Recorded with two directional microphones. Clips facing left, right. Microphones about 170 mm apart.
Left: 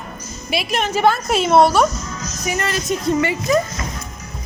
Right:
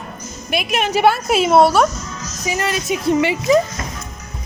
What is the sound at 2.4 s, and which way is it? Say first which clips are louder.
Speech: right 1 dB; 20° right (ahead or behind).